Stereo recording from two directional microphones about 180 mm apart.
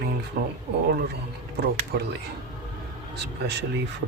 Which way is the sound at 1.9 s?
60° right (ahead or behind).